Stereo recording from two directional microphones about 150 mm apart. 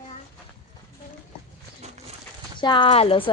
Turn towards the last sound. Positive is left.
turn(degrees=40)  # may be behind; listen again after turning